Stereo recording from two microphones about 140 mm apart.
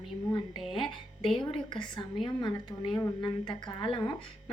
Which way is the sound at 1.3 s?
35° left (ahead or behind).